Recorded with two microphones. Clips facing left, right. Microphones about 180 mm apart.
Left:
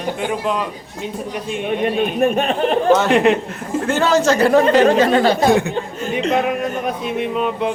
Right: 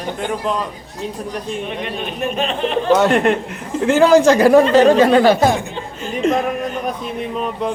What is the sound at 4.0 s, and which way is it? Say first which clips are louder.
Speech: right 5 dB; 15° right (ahead or behind).